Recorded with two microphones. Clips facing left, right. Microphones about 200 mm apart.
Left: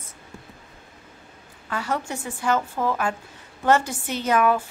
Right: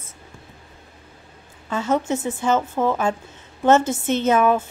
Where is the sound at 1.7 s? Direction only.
20° right (ahead or behind).